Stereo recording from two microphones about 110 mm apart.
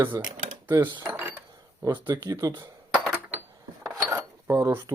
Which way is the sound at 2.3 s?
25° right (ahead or behind).